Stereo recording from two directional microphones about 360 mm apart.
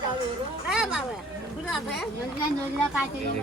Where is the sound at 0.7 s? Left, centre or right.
Centre.